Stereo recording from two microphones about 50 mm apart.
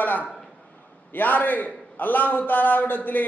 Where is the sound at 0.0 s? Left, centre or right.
Left.